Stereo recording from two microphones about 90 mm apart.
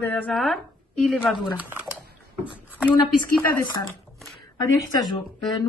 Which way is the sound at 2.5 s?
20° left (ahead or behind).